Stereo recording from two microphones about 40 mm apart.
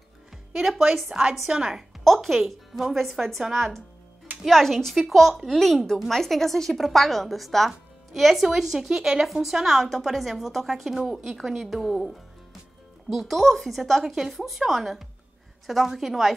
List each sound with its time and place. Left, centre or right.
0.6 s a woman's voice: centre
1.1 s a woman's voice: right
1.7 s a woman's voice: centre
2.4 s a woman's voice: centre